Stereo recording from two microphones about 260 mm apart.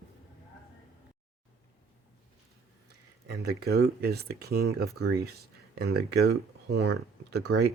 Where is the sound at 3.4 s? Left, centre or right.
Right.